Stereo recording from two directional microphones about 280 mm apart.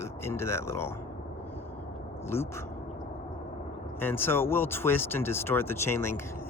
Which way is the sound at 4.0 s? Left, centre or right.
Centre.